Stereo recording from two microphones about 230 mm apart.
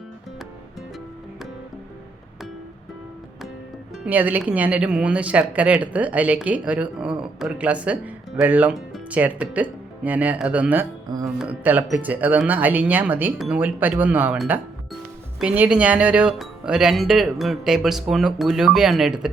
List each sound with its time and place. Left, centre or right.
4.0 s speech: centre